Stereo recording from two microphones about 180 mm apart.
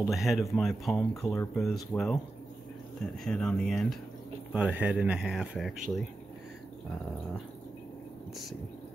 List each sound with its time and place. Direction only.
0.1 s speech: centre (ahead or behind)
1.3 s speech: 15° left (ahead or behind)
1.6 s speech: centre (ahead or behind)
3.3 s speech: 5° left (ahead or behind)